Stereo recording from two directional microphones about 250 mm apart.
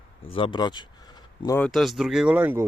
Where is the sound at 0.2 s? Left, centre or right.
Left.